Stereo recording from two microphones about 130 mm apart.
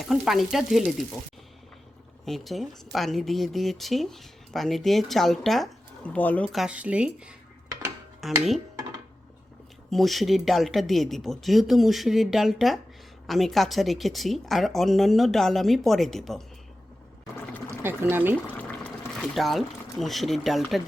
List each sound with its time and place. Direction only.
0.0 s speech: centre (ahead or behind)
2.2 s speech: centre (ahead or behind)
6.4 s speech: centre (ahead or behind)
8.2 s dishes: centre (ahead or behind)
9.9 s speech: centre (ahead or behind)
17.3 s pour: 15° left (ahead or behind)
17.7 s speech: 15° right (ahead or behind)
18.4 s water: 10° left (ahead or behind)